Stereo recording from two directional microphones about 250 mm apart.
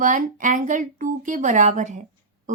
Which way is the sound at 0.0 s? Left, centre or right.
Right.